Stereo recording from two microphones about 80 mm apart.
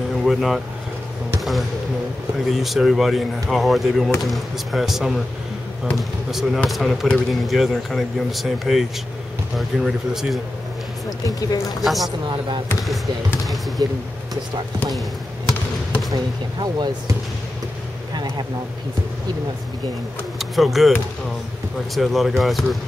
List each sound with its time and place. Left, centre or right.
0.1 s speech: centre
2.5 s speech: centre
6.3 s speech: centre
11.2 s speech: left
11.8 s speech: centre
16.5 s speech: right
20.3 s speech: centre
21.9 s speech: centre